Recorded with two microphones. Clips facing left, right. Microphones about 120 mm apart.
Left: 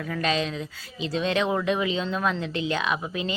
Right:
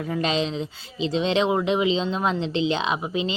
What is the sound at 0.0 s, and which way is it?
Speech, 25° right (ahead or behind).